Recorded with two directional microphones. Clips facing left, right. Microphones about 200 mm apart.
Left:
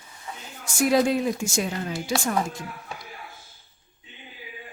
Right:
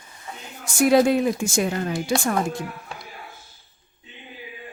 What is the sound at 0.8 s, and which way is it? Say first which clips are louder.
A woman's voice: right 4 dB; 60° right (ahead or behind).